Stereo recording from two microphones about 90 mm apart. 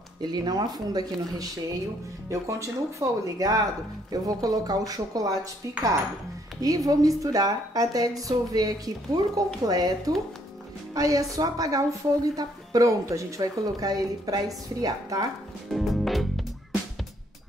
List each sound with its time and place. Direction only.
0.2 s speech: 50° right (ahead or behind)
2.2 s a woman's voice: 35° right (ahead or behind)
15.7 s music: centre (ahead or behind)